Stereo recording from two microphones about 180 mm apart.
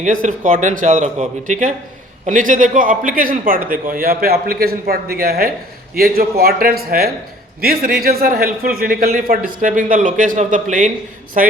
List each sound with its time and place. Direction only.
0.0 s a man's voice: 45° right (ahead or behind)